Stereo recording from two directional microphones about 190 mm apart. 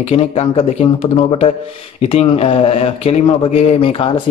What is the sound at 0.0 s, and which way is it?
Speech, 35° left (ahead or behind).